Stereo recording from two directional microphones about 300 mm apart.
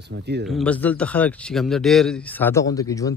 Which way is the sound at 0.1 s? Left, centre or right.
Right.